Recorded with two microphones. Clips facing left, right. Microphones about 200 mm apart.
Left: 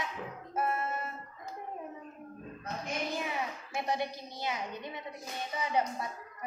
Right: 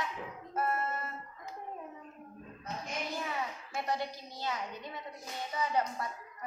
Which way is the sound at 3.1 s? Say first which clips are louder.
Left 2 dB; 15° left (ahead or behind).